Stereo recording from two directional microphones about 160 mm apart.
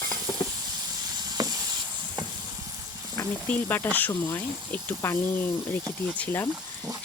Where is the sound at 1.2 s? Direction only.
25° right (ahead or behind).